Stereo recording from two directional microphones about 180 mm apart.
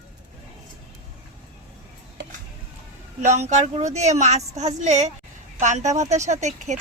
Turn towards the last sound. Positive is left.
turn(degrees=-40)  # may be behind; listen again after turning